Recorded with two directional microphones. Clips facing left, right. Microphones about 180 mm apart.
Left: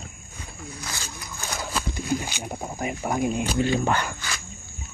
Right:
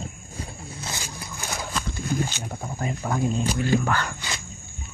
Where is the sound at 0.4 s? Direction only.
25° right (ahead or behind).